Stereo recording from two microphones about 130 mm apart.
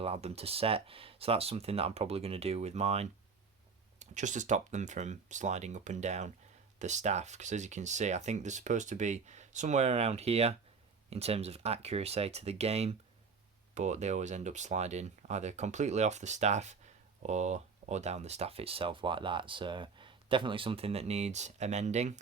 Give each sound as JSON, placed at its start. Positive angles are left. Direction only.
{"t": 0.0, "sound": "speech", "side_deg": -50}
{"t": 4.0, "sound": "speech", "side_deg": -70}